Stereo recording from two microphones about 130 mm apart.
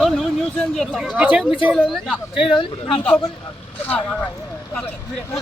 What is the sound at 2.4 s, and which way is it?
Speech, 40° left (ahead or behind).